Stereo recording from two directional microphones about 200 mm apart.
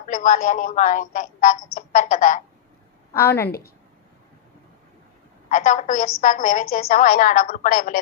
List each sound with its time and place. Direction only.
0.1 s a woman's voice: 40° left (ahead or behind)
3.1 s a woman's voice: 15° left (ahead or behind)
5.5 s a woman's voice: 40° left (ahead or behind)